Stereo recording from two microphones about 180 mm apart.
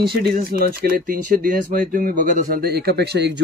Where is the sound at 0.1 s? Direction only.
60° right (ahead or behind).